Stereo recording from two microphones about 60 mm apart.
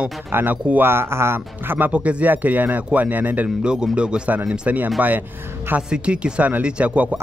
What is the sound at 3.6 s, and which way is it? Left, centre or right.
Speech, centre.